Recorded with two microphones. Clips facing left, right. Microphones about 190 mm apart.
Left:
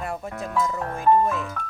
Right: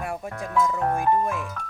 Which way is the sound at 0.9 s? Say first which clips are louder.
Left 3 dB; 15° right (ahead or behind).